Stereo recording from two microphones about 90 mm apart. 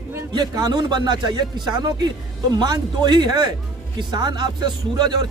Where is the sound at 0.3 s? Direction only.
50° right (ahead or behind).